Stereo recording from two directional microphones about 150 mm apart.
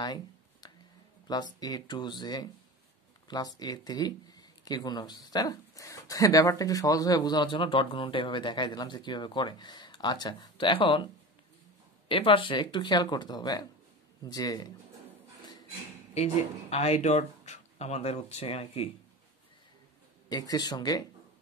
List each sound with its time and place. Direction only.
0.0 s a sound: 30° left (ahead or behind)
1.2 s speech: 25° left (ahead or behind)
12.1 s speech: 35° left (ahead or behind)
16.7 s speech: 45° left (ahead or behind)
20.2 s speech: 25° left (ahead or behind)